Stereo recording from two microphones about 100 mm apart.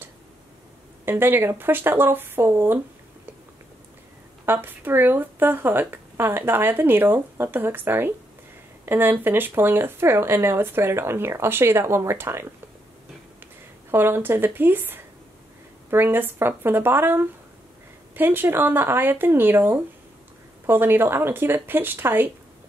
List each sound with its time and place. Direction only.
1.0 s speech: 20° right (ahead or behind)
4.5 s speech: 20° right (ahead or behind)
13.8 s speech: 25° right (ahead or behind)